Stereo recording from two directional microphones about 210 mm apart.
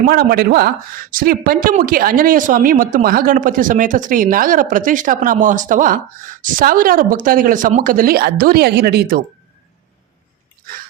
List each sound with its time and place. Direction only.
0.0 s speech: 45° right (ahead or behind)